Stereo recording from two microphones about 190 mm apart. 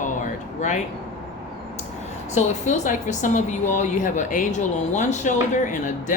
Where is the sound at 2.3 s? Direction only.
35° left (ahead or behind).